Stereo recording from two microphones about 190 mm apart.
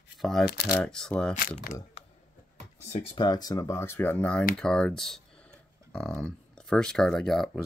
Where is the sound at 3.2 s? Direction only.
20° left (ahead or behind).